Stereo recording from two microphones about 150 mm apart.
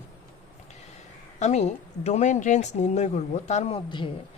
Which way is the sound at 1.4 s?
50° left (ahead or behind).